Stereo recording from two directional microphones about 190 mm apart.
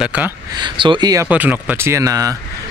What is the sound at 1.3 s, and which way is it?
Speech, 10° right (ahead or behind).